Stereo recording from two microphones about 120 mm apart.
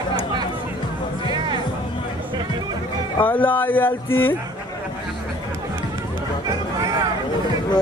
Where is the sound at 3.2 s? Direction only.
15° left (ahead or behind).